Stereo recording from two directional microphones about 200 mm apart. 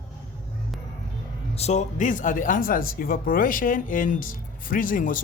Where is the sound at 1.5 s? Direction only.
35° left (ahead or behind).